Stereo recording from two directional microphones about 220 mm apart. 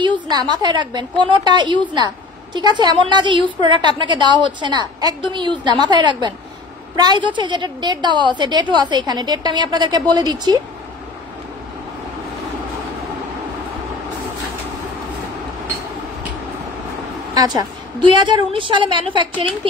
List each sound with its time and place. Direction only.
0.0 s a woman's voice: 20° right (ahead or behind)
17.3 s a woman's voice: 20° right (ahead or behind)